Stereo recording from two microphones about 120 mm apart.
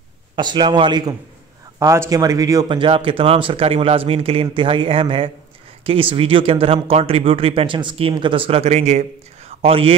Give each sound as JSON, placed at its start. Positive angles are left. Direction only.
{"t": 0.4, "sound": "speech", "side_deg": -40}
{"t": 1.8, "sound": "speech", "side_deg": -25}
{"t": 2.8, "sound": "speech", "side_deg": -45}